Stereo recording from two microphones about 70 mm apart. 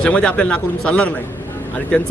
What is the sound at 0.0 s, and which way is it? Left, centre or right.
Speech, centre.